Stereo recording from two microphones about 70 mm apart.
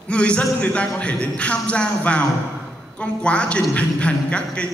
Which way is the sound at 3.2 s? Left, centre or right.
Centre.